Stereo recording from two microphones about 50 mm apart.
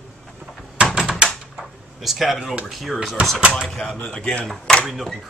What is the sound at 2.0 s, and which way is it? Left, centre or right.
Speech, centre.